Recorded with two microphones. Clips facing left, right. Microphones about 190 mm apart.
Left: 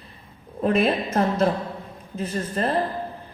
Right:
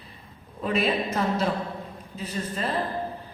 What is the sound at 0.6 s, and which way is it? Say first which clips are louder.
Speech: left 4 dB; 50° left (ahead or behind).